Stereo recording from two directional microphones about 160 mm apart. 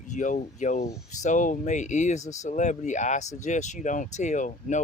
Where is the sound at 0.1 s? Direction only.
50° left (ahead or behind).